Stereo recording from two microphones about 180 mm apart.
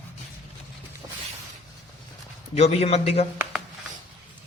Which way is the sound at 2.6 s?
35° left (ahead or behind).